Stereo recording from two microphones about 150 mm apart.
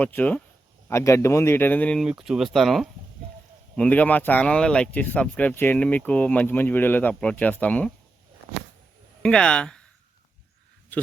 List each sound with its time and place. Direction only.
0.0 s speech: 10° left (ahead or behind)
2.0 s speech: 5° right (ahead or behind)
3.8 s speech: 10° left (ahead or behind)
9.2 s speech: 5° left (ahead or behind)
10.9 s speech: 10° left (ahead or behind)